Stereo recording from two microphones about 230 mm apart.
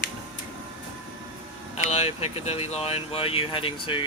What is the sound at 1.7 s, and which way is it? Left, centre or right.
Speech, left.